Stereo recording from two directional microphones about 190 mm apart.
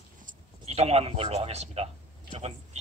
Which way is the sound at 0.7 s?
35° right (ahead or behind).